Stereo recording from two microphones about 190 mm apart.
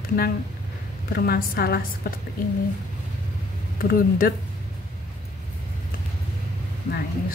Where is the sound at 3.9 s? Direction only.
50° left (ahead or behind).